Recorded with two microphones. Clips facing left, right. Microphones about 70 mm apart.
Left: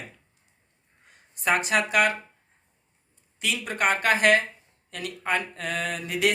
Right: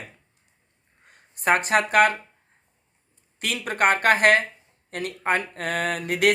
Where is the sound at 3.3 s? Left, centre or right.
Right.